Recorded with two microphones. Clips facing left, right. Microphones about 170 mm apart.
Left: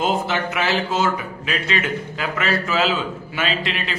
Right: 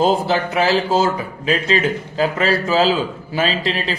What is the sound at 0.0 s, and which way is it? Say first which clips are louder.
A man's voice: right 5 dB; 35° right (ahead or behind).